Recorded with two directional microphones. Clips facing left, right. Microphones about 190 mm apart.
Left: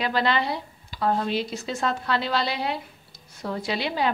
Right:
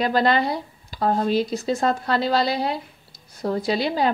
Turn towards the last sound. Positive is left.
turn(degrees=-40)  # may be behind; listen again after turning